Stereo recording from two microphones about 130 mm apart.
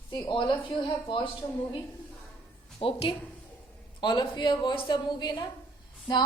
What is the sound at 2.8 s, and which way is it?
A woman's voice, 45° left (ahead or behind).